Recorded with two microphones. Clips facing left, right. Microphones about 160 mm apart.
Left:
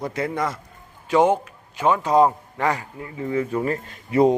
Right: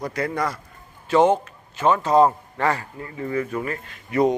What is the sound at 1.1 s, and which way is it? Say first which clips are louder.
A man's voice: right 1 dB; 10° left (ahead or behind).